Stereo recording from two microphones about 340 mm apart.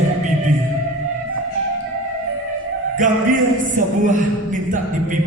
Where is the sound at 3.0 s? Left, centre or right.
Right.